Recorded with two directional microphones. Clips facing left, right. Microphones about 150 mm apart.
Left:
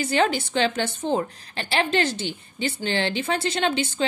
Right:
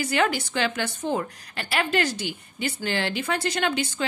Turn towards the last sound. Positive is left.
turn(degrees=25)  # may be behind; listen again after turning